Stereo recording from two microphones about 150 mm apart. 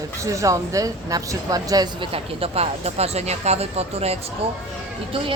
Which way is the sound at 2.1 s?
40° right (ahead or behind).